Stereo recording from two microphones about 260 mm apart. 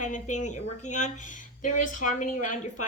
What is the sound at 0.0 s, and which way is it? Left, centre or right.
A woman's voice, left.